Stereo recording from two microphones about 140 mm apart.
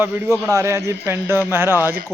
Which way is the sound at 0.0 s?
15° right (ahead or behind).